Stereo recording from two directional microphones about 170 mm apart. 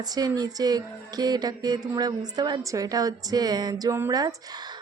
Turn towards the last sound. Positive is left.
turn(degrees=-25)  # may be behind; listen again after turning